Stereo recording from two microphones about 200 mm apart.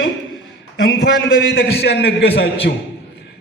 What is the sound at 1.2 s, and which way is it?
A man's voice, 50° left (ahead or behind).